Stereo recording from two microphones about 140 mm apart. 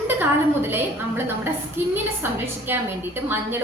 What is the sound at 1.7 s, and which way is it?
A woman's voice, 15° right (ahead or behind).